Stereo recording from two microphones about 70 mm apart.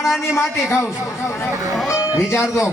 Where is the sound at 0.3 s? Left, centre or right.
Left.